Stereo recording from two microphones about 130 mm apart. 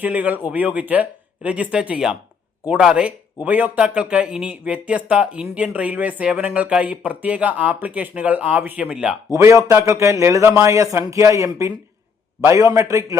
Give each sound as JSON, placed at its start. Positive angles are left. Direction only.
{"t": 0.0, "sound": "speech", "side_deg": -10}
{"t": 9.3, "sound": "speech", "side_deg": -25}